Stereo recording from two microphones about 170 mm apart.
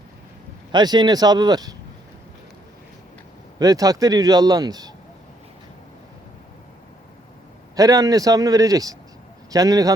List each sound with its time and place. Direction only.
0.7 s speech: 25° right (ahead or behind)
3.6 s speech: 20° right (ahead or behind)
7.8 s speech: 20° right (ahead or behind)